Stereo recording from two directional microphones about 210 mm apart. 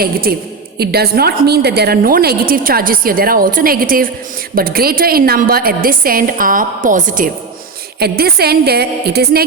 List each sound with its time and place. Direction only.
0.0 s a woman's voice: 45° right (ahead or behind)